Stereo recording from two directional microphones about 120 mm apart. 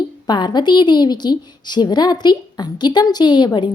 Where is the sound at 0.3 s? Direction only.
35° left (ahead or behind).